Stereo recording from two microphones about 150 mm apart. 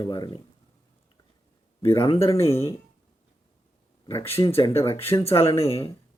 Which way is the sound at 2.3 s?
20° left (ahead or behind).